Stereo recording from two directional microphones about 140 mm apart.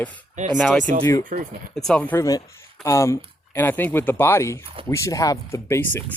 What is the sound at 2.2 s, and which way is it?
Speech, 25° left (ahead or behind).